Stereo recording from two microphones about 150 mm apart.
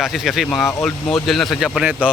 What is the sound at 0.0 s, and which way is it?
Speech, centre (ahead or behind).